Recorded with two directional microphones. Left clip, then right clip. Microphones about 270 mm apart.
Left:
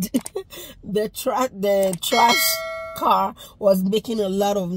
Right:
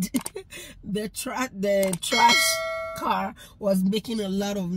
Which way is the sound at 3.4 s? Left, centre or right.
Centre.